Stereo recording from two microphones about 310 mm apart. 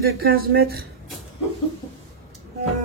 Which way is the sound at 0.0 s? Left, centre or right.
Right.